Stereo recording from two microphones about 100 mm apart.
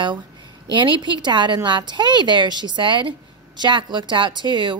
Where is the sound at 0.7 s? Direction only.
50° right (ahead or behind).